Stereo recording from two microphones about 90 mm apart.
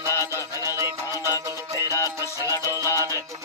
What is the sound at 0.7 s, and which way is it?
Music, 30° right (ahead or behind).